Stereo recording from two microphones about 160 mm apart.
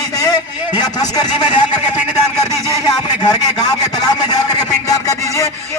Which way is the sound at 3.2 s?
25° left (ahead or behind).